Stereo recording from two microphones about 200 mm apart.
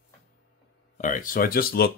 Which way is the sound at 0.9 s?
40° left (ahead or behind).